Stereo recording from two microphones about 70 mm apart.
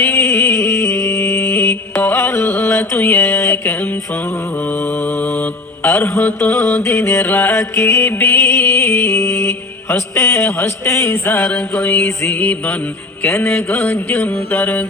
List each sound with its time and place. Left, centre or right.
0.0 s music: left
4.6 s mantra: left
11.5 s music: left
12.3 s mantra: left